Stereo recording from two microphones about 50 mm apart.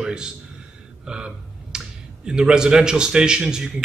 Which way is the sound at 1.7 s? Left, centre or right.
Centre.